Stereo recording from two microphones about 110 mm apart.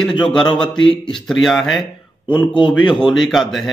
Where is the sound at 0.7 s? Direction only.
50° left (ahead or behind).